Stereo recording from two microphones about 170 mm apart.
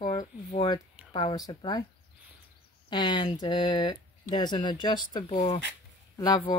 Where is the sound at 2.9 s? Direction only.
30° left (ahead or behind).